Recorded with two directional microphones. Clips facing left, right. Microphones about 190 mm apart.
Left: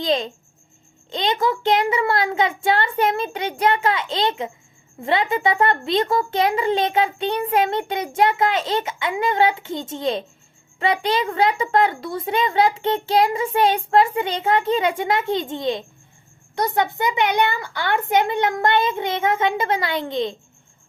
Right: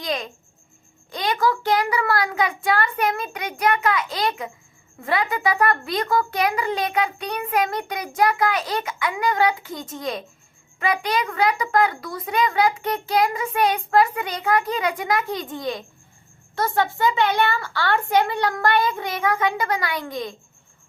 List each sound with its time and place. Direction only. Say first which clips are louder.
0.0 s a child's voice: left 6 dB; 25° left (ahead or behind)